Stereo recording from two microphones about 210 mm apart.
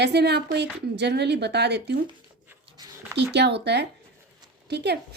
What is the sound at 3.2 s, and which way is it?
A woman's voice, 55° right (ahead or behind).